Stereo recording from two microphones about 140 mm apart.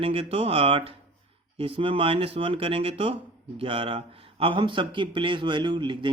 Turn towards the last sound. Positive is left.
turn(degrees=-35)  # may be behind; listen again after turning